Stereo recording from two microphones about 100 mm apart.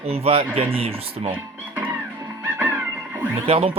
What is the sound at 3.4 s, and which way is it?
Speech, 75° right (ahead or behind).